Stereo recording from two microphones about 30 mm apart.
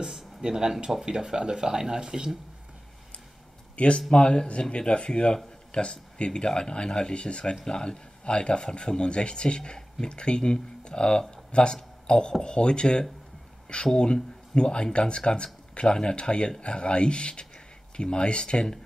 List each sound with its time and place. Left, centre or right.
0.0 s a sound: right
1.0 s speech: centre
3.7 s speech: left
4.1 s speech: left
7.6 s speech: left
9.6 s speech: centre
10.0 s speech: left